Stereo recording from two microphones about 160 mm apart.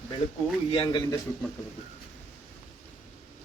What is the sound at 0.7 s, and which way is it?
Speech, 30° left (ahead or behind).